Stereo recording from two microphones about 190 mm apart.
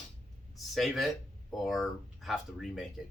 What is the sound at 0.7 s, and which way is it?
Speech, centre (ahead or behind).